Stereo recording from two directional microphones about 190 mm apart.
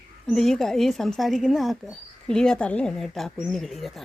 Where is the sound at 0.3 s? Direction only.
Centre (ahead or behind).